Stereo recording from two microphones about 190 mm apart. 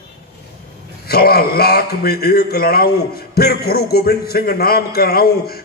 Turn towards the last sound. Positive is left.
turn(degrees=55)  # may be behind; listen again after turning